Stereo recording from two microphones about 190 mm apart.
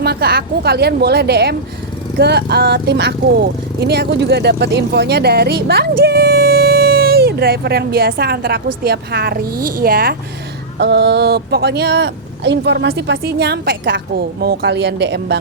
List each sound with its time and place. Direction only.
0.0 s speech: 55° right (ahead or behind)